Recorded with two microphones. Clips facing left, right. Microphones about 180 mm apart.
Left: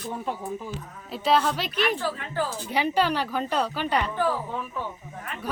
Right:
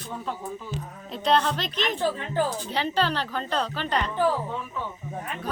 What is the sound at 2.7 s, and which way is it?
Speech, 10° left (ahead or behind).